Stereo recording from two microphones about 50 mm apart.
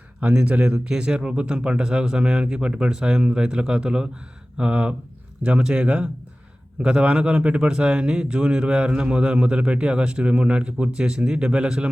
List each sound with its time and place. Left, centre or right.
0.2 s speech: right